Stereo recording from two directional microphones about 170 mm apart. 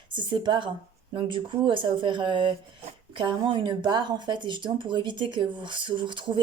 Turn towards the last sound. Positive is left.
turn(degrees=-30)  # may be behind; listen again after turning